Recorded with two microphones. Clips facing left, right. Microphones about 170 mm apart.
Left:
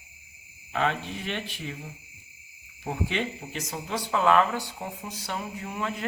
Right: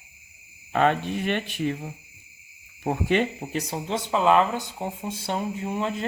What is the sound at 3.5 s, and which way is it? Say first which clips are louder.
Speech: right 5 dB; 30° right (ahead or behind).